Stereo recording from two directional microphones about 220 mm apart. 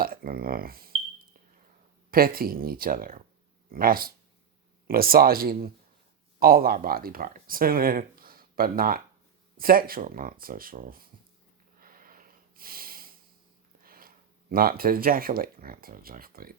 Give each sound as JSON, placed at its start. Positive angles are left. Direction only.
{"t": 0.0, "sound": "speech", "side_deg": -40}
{"t": 2.0, "sound": "speech", "side_deg": -40}
{"t": 11.8, "sound": "wheeze", "side_deg": -40}
{"t": 13.8, "sound": "a sound", "side_deg": -40}
{"t": 14.5, "sound": "speech", "side_deg": -40}